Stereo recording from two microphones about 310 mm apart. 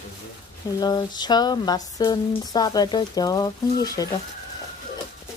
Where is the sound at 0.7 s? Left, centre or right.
Centre.